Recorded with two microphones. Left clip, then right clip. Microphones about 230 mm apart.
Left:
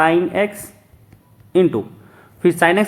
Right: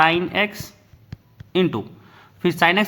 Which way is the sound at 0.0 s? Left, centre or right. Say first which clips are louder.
Left 2 dB; right.